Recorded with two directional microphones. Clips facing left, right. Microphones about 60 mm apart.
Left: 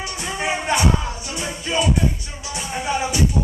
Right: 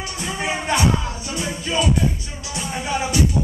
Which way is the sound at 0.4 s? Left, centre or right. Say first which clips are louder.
Even; centre.